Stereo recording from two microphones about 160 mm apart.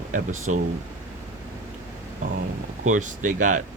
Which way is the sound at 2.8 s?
50° right (ahead or behind).